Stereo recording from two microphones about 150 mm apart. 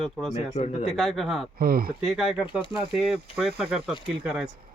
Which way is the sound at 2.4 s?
30° left (ahead or behind).